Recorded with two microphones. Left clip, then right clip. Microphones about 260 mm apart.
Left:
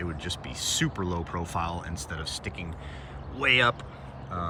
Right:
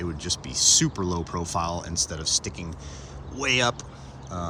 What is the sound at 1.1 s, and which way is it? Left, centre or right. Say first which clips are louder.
Speech: right 3 dB; centre.